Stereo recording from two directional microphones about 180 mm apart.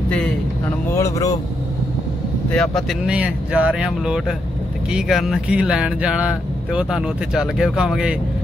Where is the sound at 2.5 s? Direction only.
5° left (ahead or behind).